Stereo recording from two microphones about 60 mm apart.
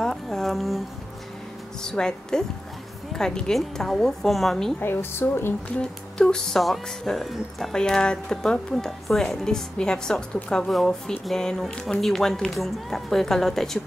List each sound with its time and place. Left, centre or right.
0.0 s a sound: centre
1.8 s speech: centre
4.7 s a woman's voice: left
5.8 s speech: centre